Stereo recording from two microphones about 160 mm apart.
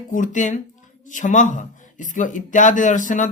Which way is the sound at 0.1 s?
50° left (ahead or behind).